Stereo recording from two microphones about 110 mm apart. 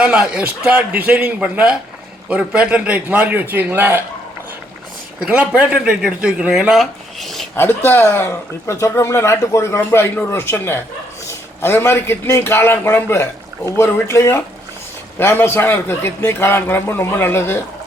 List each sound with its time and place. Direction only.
0.0 s speech: 10° right (ahead or behind)
5.2 s speech: 10° right (ahead or behind)
7.9 s speech: 20° left (ahead or behind)